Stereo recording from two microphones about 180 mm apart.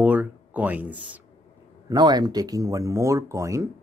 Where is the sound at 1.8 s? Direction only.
25° right (ahead or behind).